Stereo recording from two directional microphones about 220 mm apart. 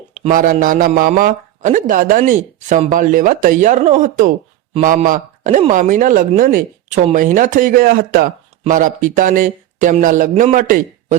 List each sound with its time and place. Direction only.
0.3 s a man's voice: 35° right (ahead or behind)